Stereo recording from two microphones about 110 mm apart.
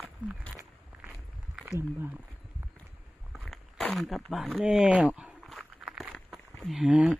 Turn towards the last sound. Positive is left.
turn(degrees=-10)  # may be behind; listen again after turning